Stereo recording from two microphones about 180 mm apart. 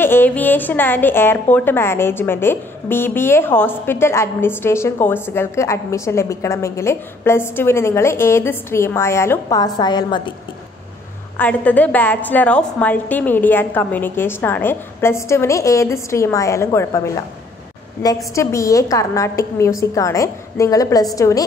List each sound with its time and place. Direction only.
0.0 s a woman's voice: 10° left (ahead or behind)
11.3 s a woman's voice: 10° left (ahead or behind)